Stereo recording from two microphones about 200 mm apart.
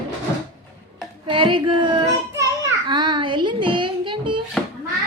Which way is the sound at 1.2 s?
25° right (ahead or behind).